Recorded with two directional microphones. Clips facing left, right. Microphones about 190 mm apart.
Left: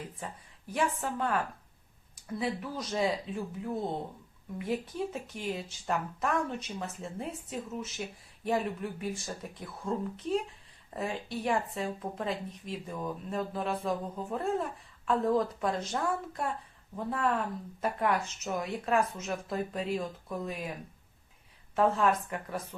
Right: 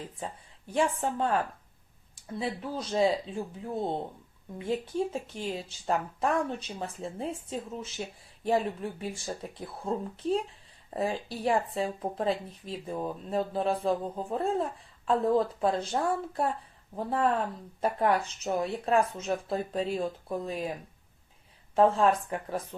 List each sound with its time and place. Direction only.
0.7 s speech: 30° right (ahead or behind)
2.4 s speech: 30° right (ahead or behind)
21.8 s speech: 30° right (ahead or behind)